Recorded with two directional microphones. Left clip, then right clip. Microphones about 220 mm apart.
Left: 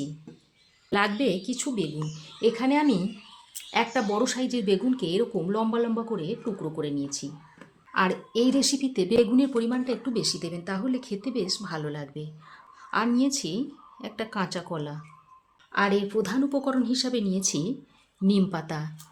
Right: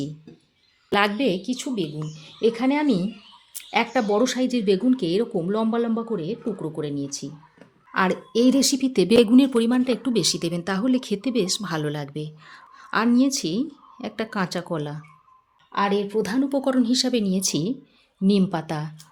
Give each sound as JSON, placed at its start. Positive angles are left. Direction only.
{"t": 0.9, "sound": "speech", "side_deg": -30}
{"t": 15.7, "sound": "speech", "side_deg": -15}